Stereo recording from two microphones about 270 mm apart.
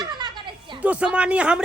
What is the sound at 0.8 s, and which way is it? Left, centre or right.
Speech, centre.